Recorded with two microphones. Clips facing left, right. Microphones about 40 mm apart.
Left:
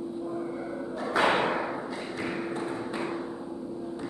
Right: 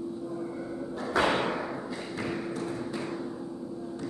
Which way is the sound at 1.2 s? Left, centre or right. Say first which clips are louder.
Left 2 dB; centre.